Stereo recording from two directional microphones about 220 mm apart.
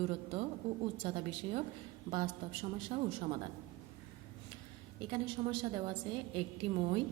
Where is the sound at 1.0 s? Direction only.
25° right (ahead or behind).